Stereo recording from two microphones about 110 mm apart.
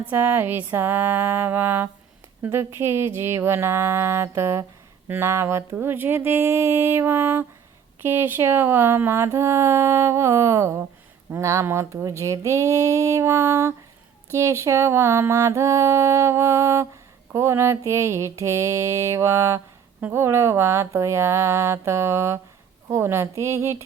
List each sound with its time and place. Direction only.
0.1 s mantra: 20° right (ahead or behind)